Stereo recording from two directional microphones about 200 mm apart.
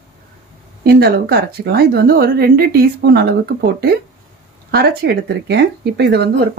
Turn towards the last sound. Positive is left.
turn(degrees=-55)  # may be behind; listen again after turning